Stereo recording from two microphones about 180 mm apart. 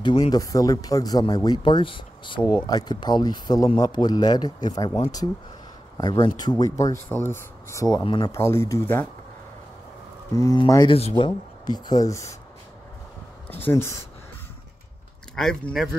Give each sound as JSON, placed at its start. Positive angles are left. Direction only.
{"t": 0.3, "sound": "speech", "side_deg": 20}
{"t": 8.3, "sound": "speech", "side_deg": 15}
{"t": 10.3, "sound": "speech", "side_deg": 20}
{"t": 13.5, "sound": "speech", "side_deg": 10}
{"t": 15.3, "sound": "speech", "side_deg": 5}